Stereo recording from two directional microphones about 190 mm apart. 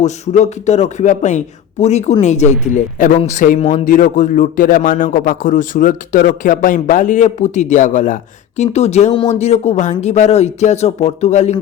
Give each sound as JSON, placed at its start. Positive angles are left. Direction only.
{"t": 0.0, "sound": "a man's voice", "side_deg": 35}